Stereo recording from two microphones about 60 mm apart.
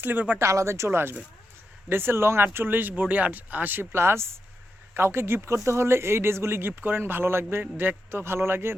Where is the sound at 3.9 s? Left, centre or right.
Right.